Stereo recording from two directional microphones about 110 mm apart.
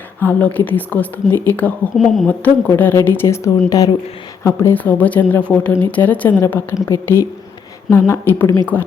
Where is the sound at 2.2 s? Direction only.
15° left (ahead or behind).